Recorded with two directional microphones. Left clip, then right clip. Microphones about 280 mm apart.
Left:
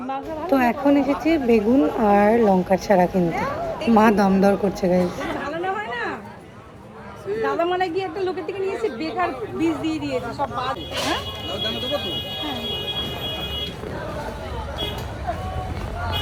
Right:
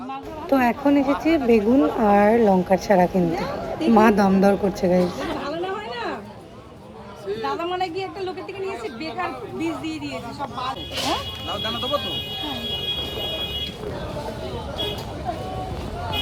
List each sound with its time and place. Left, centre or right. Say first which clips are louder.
0.5 s speech: even; centre
3.3 s children playing: left 2 dB; centre
3.9 s speech: even; centre
7.6 s a sound: left 4 dB; centre
9.6 s a sound: left 5 dB; centre
11.1 s music: even; centre